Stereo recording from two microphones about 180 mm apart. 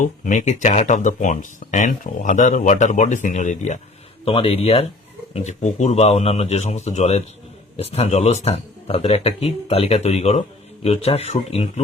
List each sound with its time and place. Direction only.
0.0 s speech: 45° left (ahead or behind)
4.3 s speech: 30° left (ahead or behind)